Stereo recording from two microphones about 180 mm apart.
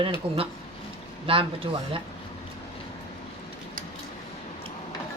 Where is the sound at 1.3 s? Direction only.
30° right (ahead or behind).